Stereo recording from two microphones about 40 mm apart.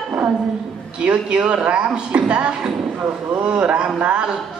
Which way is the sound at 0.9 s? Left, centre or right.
Right.